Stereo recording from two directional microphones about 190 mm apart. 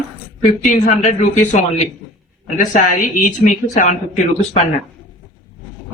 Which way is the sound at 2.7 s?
40° left (ahead or behind).